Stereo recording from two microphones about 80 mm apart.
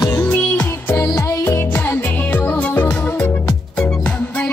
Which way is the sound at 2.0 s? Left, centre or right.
Left.